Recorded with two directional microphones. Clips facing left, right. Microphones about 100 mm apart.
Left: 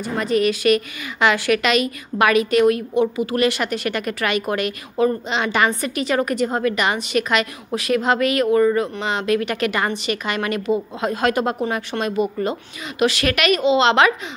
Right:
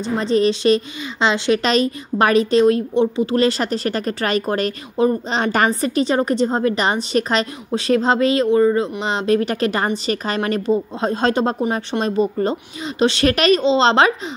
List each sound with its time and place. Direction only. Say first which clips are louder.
0.0 s a woman's voice: right 2 dB; 30° right (ahead or behind)